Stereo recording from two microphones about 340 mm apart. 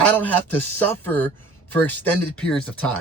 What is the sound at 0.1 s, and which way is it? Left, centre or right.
A man's voice, centre.